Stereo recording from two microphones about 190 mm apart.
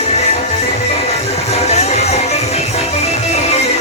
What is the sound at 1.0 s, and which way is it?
Music, 35° left (ahead or behind).